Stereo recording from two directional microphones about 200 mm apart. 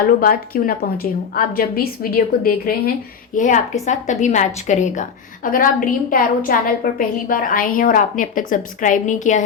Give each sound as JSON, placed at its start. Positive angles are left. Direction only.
{"t": 0.2, "sound": "a woman's voice", "side_deg": 45}